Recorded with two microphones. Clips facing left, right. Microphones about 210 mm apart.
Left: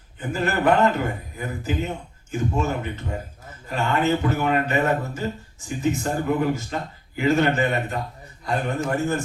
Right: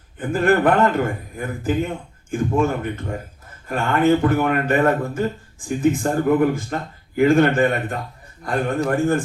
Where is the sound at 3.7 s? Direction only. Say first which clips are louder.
Right 5 dB; 55° right (ahead or behind).